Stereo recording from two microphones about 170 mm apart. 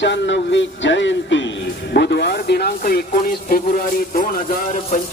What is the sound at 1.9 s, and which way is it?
Speech, 70° left (ahead or behind).